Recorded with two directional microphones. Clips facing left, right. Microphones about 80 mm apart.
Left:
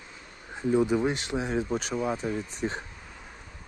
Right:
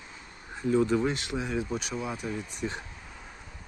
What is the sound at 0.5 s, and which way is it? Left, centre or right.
Speech, centre.